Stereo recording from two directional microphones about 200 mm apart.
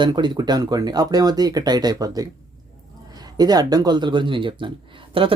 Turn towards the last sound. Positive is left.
turn(degrees=-25)  # may be behind; listen again after turning